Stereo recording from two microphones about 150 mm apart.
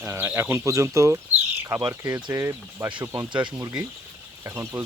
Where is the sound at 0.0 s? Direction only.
15° right (ahead or behind).